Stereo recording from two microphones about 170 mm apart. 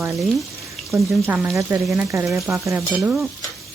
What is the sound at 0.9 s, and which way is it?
Speech, 15° right (ahead or behind).